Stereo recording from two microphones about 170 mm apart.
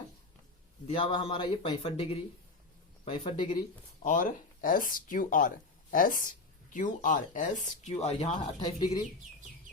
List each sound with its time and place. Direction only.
0.9 s speech: 30° left (ahead or behind)
4.0 s speech: 50° left (ahead or behind); by 9.0 s 25° left (ahead or behind)